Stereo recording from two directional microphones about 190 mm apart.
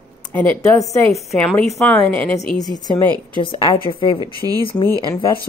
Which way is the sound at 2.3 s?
40° left (ahead or behind).